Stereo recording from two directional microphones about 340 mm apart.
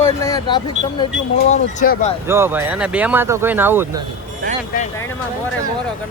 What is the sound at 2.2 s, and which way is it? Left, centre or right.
Speech, centre.